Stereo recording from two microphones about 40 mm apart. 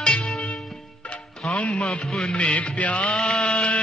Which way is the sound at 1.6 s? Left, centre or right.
Left.